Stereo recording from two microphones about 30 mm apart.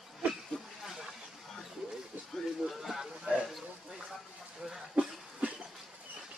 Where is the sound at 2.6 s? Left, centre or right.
Centre.